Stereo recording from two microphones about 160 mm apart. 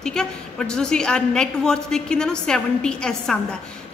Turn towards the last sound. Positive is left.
turn(degrees=5)  # may be behind; listen again after turning